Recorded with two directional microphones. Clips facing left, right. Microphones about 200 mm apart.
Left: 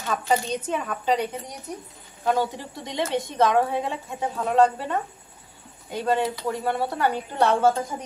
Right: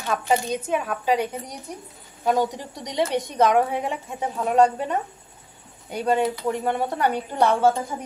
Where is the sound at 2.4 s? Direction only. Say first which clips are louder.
Right 2 dB; 15° right (ahead or behind).